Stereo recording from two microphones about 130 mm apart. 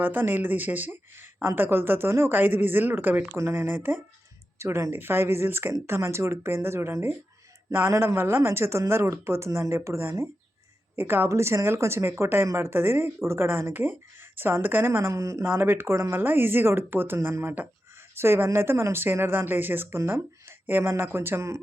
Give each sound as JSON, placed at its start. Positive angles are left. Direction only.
{"t": 0.0, "sound": "speech", "side_deg": -15}